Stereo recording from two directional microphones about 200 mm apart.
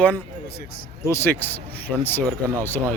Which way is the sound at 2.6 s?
10° left (ahead or behind).